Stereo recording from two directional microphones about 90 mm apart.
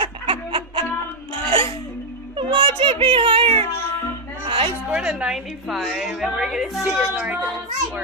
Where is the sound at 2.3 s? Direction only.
85° right.